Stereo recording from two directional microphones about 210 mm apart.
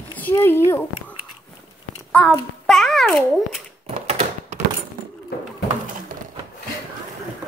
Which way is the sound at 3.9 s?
35° right (ahead or behind).